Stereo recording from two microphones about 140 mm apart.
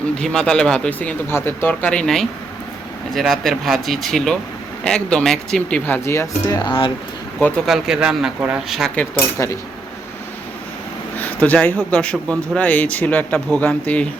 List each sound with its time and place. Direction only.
0.2 s speech: 5° left (ahead or behind)
6.6 s speech: 35° left (ahead or behind)
7.7 s speech: 5° right (ahead or behind)
9.0 s speech: 15° left (ahead or behind)
11.2 s a sound: 10° left (ahead or behind)
11.9 s speech: 10° left (ahead or behind)